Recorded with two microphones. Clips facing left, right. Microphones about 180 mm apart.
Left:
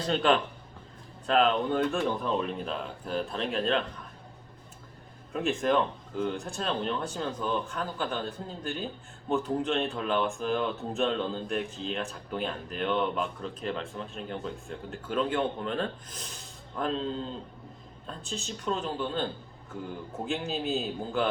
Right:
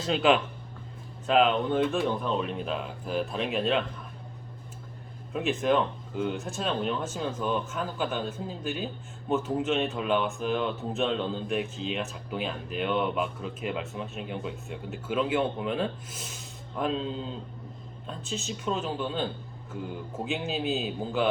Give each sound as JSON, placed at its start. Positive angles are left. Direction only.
{"t": 0.0, "sound": "speech", "side_deg": -5}
{"t": 5.3, "sound": "speech", "side_deg": 0}